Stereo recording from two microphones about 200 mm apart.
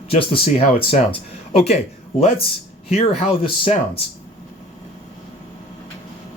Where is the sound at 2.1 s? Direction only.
30° left (ahead or behind).